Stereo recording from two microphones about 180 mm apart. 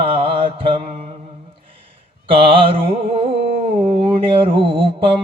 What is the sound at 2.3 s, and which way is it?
Mantra, 30° right (ahead or behind).